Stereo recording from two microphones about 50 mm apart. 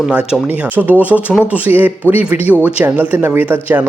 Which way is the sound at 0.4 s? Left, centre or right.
Right.